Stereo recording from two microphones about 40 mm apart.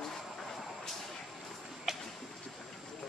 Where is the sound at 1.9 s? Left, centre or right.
Centre.